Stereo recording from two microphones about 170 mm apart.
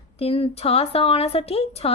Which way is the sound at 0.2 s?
35° left (ahead or behind).